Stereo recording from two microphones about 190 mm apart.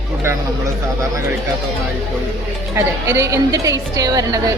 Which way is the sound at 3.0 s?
15° right (ahead or behind).